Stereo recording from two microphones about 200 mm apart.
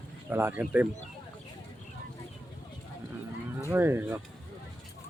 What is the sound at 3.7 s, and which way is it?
Speech, 10° right (ahead or behind).